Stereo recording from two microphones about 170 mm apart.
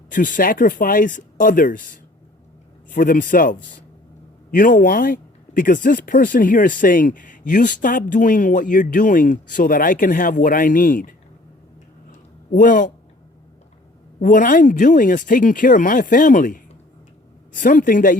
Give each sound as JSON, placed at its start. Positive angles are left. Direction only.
{"t": 0.1, "sound": "speech", "side_deg": 50}
{"t": 12.5, "sound": "speech", "side_deg": 50}
{"t": 14.2, "sound": "speech", "side_deg": 50}